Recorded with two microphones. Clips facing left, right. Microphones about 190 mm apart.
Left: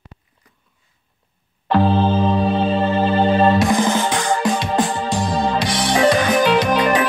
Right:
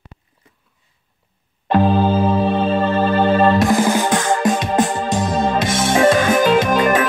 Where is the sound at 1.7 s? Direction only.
15° right (ahead or behind).